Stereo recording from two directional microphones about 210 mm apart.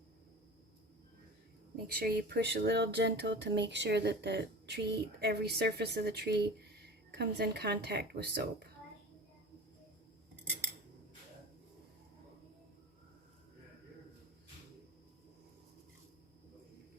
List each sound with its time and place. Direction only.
1.7 s speech: 45° right (ahead or behind)